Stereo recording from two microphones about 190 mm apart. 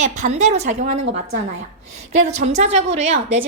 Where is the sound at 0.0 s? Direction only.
40° right (ahead or behind).